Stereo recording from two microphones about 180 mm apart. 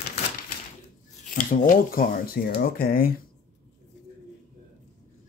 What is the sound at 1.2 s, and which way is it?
Speech, 50° left (ahead or behind).